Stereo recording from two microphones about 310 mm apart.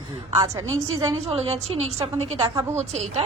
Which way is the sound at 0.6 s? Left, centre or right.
Right.